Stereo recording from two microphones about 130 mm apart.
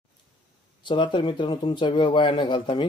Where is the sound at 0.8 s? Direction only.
35° left (ahead or behind).